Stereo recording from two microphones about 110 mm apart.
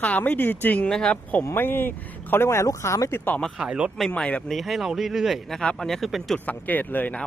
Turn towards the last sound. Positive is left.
turn(degrees=15)  # may be behind; listen again after turning